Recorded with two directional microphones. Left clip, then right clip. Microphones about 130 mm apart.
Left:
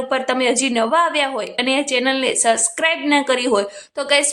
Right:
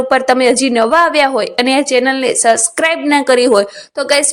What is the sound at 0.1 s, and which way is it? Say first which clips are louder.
A woman's voice: right 7 dB; 45° right (ahead or behind).